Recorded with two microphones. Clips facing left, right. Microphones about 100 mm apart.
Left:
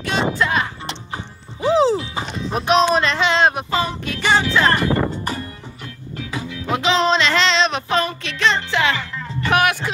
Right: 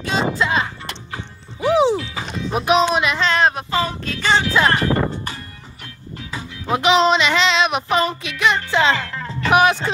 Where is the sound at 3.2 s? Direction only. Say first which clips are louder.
Left 1 dB; 20° left (ahead or behind).